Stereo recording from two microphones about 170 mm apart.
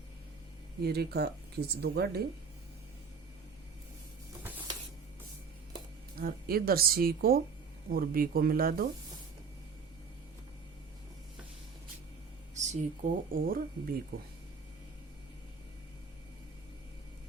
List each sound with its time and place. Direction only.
0.8 s speech: 70° right (ahead or behind)
6.1 s a woman's voice: 60° right (ahead or behind)
12.5 s speech: 45° right (ahead or behind)